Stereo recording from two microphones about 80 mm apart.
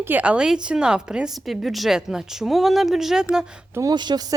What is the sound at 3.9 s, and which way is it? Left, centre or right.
Speech, right.